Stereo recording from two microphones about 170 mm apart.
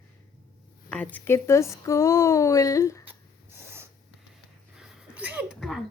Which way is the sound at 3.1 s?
15° right (ahead or behind).